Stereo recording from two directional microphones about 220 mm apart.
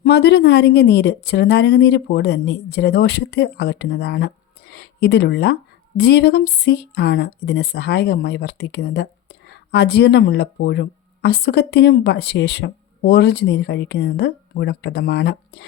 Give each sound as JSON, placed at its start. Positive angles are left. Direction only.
{"t": 0.0, "sound": "speech", "side_deg": 45}